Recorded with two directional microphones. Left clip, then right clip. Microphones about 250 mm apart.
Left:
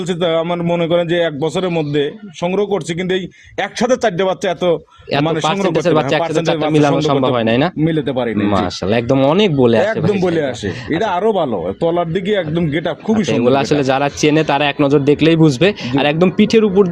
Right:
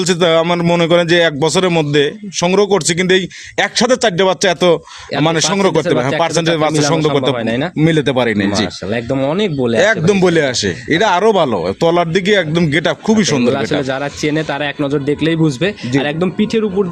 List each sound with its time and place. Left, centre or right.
0.1 s a man's voice: right
5.8 s speech: centre
7.3 s speech: centre
7.8 s a man's voice: right
8.4 s speech: centre
10.1 s a man's voice: right
13.2 s speech: centre